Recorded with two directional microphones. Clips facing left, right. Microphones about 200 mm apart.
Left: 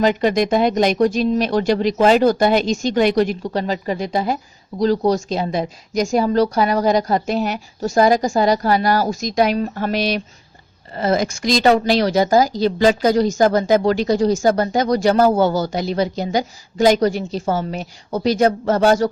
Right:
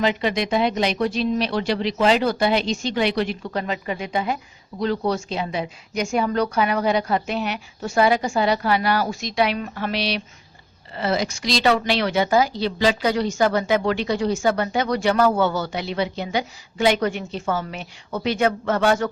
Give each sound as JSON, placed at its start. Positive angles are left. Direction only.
{"t": 0.0, "sound": "a woman's voice", "side_deg": 45}